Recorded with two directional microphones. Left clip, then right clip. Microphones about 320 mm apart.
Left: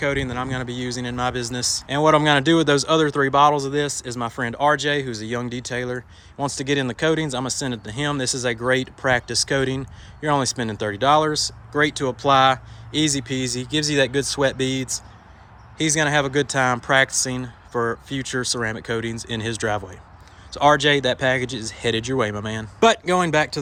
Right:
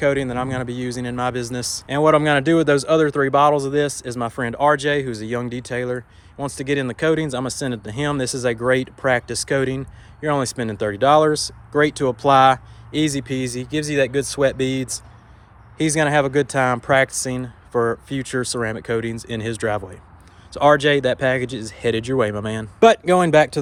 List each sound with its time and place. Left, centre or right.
0.0 s speech: centre